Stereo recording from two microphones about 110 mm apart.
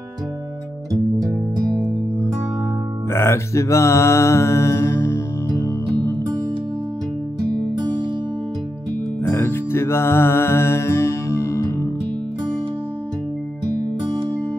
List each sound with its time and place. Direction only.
3.1 s mantra: 25° left (ahead or behind)
9.3 s music: 20° left (ahead or behind)